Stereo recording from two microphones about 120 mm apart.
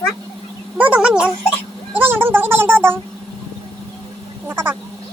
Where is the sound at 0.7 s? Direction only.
10° right (ahead or behind).